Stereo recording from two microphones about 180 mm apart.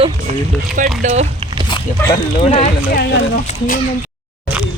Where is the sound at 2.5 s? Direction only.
40° left (ahead or behind).